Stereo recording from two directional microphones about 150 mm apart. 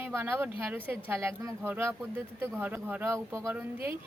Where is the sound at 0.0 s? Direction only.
15° right (ahead or behind).